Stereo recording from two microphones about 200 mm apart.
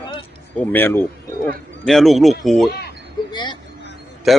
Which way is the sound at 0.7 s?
10° left (ahead or behind).